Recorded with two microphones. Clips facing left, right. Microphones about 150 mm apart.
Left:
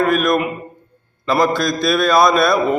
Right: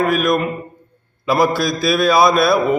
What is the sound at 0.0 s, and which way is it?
A man's voice, centre (ahead or behind).